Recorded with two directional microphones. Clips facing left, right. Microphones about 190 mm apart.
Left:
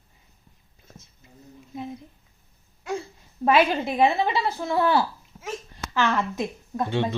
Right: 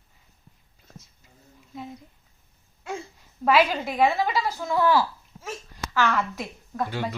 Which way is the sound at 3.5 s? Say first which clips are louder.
Left 1 dB; 25° left (ahead or behind).